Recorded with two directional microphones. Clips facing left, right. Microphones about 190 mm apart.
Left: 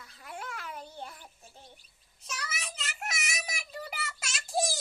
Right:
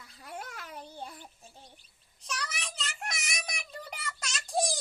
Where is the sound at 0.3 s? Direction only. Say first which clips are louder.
Left 2 dB; 40° right (ahead or behind).